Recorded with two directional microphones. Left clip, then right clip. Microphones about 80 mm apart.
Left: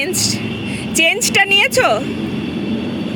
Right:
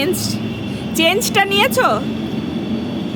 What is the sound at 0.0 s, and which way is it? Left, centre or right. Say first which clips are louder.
Speech: left 1 dB; centre.